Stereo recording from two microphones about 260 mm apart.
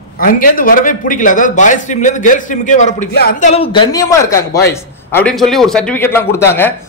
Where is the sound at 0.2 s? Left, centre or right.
Left.